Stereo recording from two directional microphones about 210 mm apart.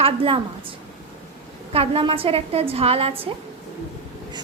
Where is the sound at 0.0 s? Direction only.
25° right (ahead or behind).